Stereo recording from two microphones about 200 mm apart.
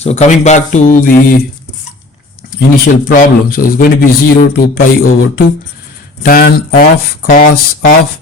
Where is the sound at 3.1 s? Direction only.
45° left (ahead or behind).